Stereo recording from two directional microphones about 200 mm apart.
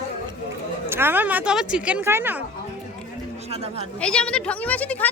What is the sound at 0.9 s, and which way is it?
Speech, 10° right (ahead or behind).